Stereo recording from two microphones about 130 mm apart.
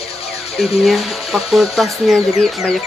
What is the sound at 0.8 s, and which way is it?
Speech, centre (ahead or behind).